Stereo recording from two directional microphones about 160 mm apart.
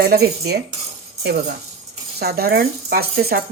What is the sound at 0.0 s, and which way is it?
Speech, 75° right (ahead or behind).